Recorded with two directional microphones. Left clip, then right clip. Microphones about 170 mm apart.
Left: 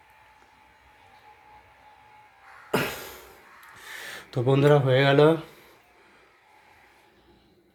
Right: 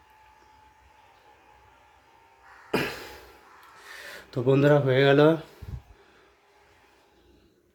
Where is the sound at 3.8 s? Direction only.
Centre (ahead or behind); by 5.4 s 15° right (ahead or behind).